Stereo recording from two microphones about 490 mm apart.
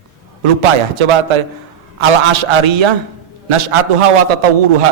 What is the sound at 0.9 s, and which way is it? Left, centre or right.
A man's voice, right.